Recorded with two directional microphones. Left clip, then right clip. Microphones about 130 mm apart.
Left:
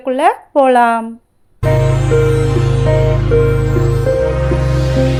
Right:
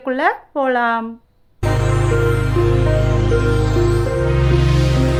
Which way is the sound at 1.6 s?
Centre (ahead or behind).